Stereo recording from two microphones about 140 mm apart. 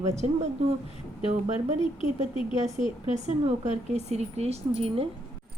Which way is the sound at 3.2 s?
55° right (ahead or behind).